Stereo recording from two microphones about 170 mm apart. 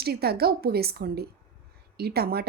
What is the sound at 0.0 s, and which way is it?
Speech, 70° right (ahead or behind).